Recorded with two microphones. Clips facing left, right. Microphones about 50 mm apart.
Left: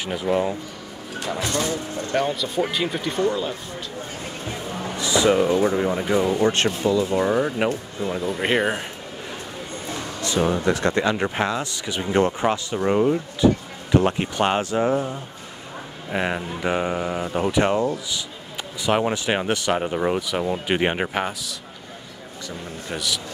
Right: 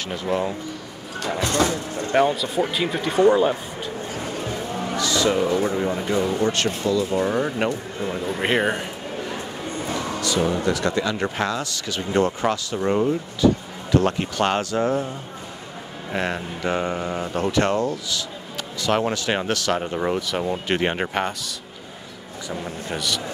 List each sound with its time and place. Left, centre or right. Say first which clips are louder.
0.0 s speech: left 2 dB; centre
2.3 s speech: right 1 dB; centre
3.2 s speech: right 8 dB; right
4.9 s speech: left 3 dB; centre
10.2 s speech: left 2 dB; left
11.3 s speech: left 1 dB; centre
16.1 s speech: left 1 dB; centre
22.8 s speech: even; centre